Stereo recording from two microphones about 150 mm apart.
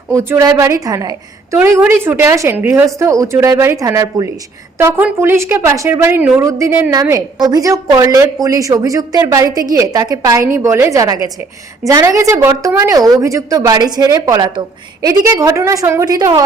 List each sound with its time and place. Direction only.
0.1 s a woman's voice: 20° right (ahead or behind)